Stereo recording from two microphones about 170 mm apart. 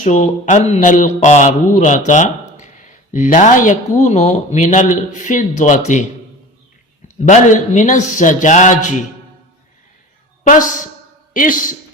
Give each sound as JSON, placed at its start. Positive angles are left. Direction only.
{"t": 0.0, "sound": "a man's voice", "side_deg": 45}
{"t": 7.2, "sound": "a man's voice", "side_deg": 45}
{"t": 10.4, "sound": "a man's voice", "side_deg": 50}